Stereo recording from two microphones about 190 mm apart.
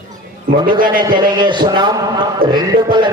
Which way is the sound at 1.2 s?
25° right (ahead or behind).